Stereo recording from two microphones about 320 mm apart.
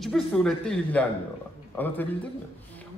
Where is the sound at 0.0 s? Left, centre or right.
Centre.